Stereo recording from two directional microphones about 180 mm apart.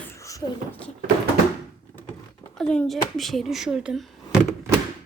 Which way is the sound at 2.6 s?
5° left (ahead or behind).